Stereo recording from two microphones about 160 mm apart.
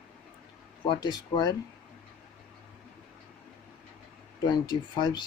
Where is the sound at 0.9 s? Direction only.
25° left (ahead or behind).